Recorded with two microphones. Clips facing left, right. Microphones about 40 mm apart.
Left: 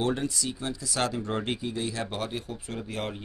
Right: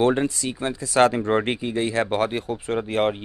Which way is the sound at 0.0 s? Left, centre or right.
Right.